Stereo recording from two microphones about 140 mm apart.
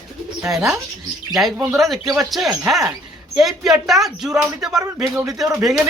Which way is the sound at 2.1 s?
Centre (ahead or behind).